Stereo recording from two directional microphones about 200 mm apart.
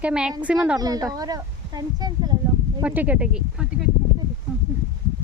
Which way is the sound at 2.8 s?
10° right (ahead or behind).